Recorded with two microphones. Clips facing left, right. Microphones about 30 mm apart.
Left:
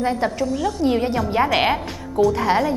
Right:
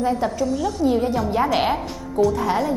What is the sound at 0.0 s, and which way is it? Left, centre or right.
Speech, left.